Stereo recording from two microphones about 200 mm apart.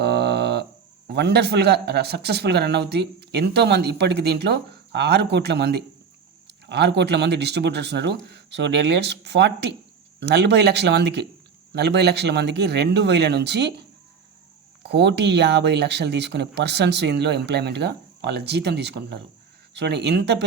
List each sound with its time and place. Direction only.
0.0 s a sound: 55° right (ahead or behind)
1.0 s a man's voice: 55° right (ahead or behind)
14.8 s a man's voice: 60° right (ahead or behind)